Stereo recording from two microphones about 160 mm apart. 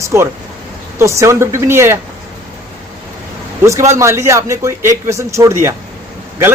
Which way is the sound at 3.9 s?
15° right (ahead or behind).